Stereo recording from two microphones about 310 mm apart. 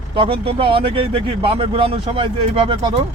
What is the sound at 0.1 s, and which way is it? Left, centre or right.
Speech, centre.